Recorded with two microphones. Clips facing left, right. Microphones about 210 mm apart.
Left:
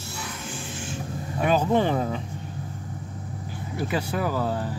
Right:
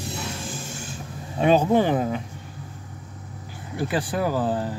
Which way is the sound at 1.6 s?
10° right (ahead or behind).